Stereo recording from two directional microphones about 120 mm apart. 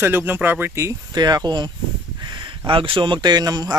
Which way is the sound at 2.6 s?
45° right (ahead or behind).